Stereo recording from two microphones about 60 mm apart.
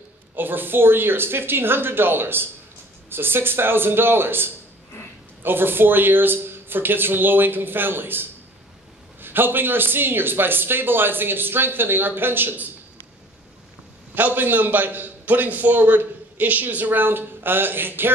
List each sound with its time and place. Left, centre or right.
0.4 s a man's voice: right
14.1 s a man's voice: right